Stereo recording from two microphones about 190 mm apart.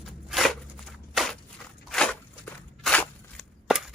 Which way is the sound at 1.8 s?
5° left (ahead or behind).